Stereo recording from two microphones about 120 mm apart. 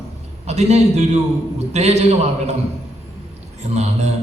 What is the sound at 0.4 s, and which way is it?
A man's voice, 65° right (ahead or behind).